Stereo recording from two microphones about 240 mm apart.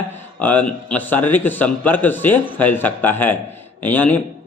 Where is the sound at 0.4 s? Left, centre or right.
Centre.